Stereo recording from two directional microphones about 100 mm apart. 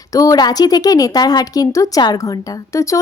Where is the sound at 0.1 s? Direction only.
35° left (ahead or behind).